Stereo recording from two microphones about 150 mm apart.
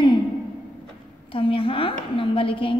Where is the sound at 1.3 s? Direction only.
35° left (ahead or behind).